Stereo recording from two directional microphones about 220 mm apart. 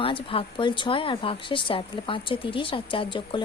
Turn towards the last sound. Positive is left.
turn(degrees=20)  # may be behind; listen again after turning